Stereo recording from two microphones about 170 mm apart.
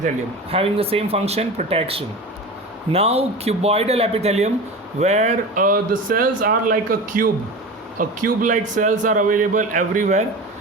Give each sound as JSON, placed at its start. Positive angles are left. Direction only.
{"t": 0.5, "sound": "speech", "side_deg": -35}